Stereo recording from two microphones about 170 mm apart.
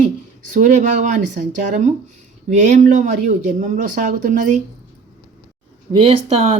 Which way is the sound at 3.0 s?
45° right (ahead or behind).